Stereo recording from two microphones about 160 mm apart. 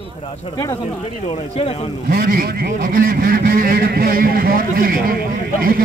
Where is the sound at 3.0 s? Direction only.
65° right (ahead or behind).